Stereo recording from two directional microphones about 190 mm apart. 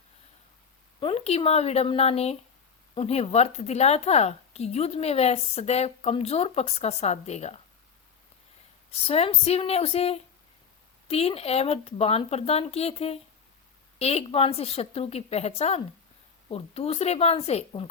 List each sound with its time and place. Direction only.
0.9 s a woman's voice: 30° left (ahead or behind)
8.9 s a woman's voice: 30° left (ahead or behind)